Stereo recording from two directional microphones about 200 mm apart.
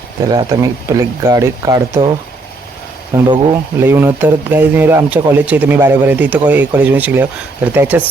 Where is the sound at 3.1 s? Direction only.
20° right (ahead or behind).